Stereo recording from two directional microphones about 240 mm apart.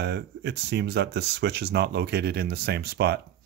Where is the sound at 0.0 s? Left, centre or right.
Right.